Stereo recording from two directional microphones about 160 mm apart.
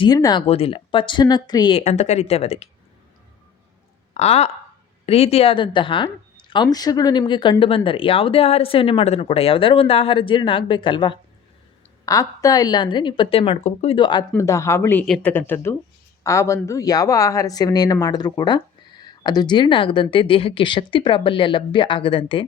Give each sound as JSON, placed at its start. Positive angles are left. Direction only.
{"t": 0.0, "sound": "speech", "side_deg": 25}
{"t": 0.4, "sound": "speech", "side_deg": 40}
{"t": 1.8, "sound": "speech", "side_deg": 45}
{"t": 4.1, "sound": "speech", "side_deg": 40}
{"t": 14.3, "sound": "speech", "side_deg": 20}
{"t": 15.0, "sound": "speech", "side_deg": 0}
{"t": 15.3, "sound": "speech", "side_deg": 15}